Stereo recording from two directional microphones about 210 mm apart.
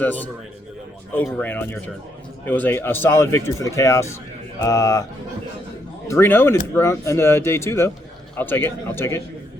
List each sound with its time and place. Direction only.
0.0 s speech: 10° left (ahead or behind)
6.1 s speech: 10° left (ahead or behind)